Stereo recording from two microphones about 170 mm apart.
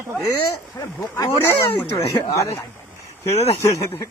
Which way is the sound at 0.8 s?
20° left (ahead or behind).